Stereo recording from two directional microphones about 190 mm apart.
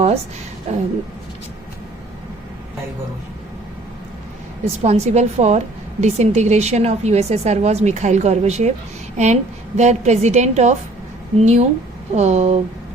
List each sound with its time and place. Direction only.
0.7 s a woman's voice: 35° right (ahead or behind)
4.8 s a woman's voice: 35° right (ahead or behind)